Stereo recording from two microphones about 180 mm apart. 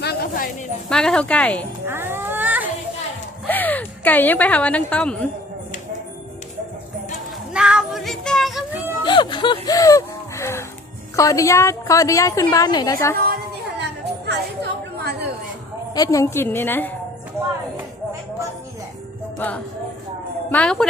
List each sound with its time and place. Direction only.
0.0 s a sound: 55° left (ahead or behind)
0.9 s a woman's voice: 5° left (ahead or behind)
1.9 s a sound: 10° right (ahead or behind)
3.4 s a woman's voice: 10° left (ahead or behind)
7.5 s music: 5° right (ahead or behind)
9.0 s a woman's voice: 25° left (ahead or behind)
13.1 s chatter: 60° right (ahead or behind)
16.0 s a woman's voice: 15° left (ahead or behind)
19.4 s a woman's voice: 10° left (ahead or behind)